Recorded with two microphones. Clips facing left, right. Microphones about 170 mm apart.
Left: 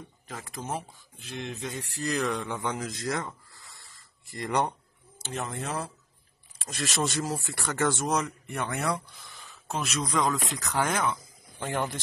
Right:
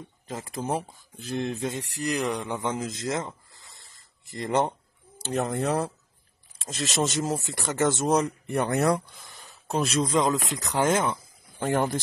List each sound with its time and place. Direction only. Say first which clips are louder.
0.3 s speech: right 6 dB; 25° right (ahead or behind)
2.0 s speech: right 1 dB; 15° right (ahead or behind)
5.2 s speech: right 8 dB; 35° right (ahead or behind)
6.6 s speech: right 3 dB; 20° right (ahead or behind)
8.2 s speech: right 6 dB; 35° right (ahead or behind)
11.6 s speech: right 6 dB; 45° right (ahead or behind)